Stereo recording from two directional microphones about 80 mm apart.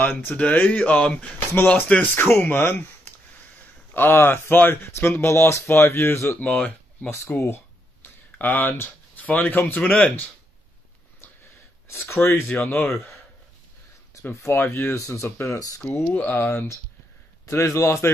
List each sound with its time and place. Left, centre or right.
0.0 s speech: left
2.2 s speech: left
6.4 s speech: centre
7.2 s a sound: left
9.8 s speech: centre
11.9 s speech: left
14.3 s speech: left
16.1 s speech: left